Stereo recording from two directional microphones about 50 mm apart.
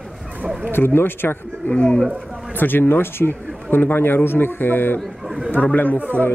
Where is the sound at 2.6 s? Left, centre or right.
Left.